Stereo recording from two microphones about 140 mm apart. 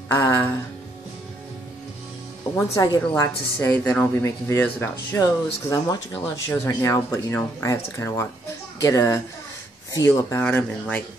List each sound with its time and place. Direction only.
0.1 s speech: 20° left (ahead or behind)
2.5 s speech: 20° left (ahead or behind)
3.2 s speech: 10° left (ahead or behind)